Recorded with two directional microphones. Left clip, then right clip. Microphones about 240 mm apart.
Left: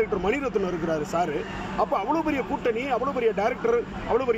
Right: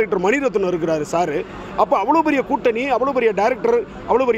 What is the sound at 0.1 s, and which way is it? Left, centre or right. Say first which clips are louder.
A man's voice: right 7 dB; right.